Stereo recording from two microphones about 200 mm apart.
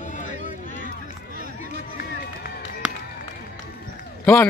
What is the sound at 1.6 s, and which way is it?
Run, 45° left (ahead or behind).